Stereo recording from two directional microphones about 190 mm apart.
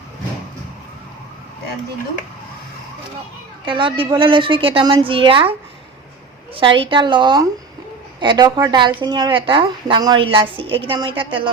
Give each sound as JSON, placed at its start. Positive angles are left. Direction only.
{"t": 3.7, "sound": "a woman's voice", "side_deg": -25}
{"t": 6.6, "sound": "a woman's voice", "side_deg": -25}